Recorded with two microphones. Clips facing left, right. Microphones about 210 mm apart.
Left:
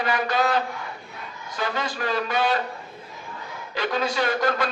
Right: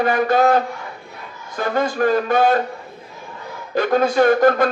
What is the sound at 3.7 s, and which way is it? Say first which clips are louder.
Speech: right 9 dB; 50° right (ahead or behind).